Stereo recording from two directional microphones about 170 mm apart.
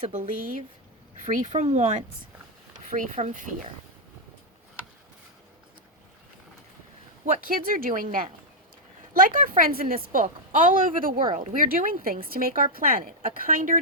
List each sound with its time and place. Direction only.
0.0 s a woman's voice: 45° right (ahead or behind)
7.3 s a woman's voice: 55° right (ahead or behind)
11.2 s speech: 30° right (ahead or behind)
11.5 s a woman's voice: 55° right (ahead or behind)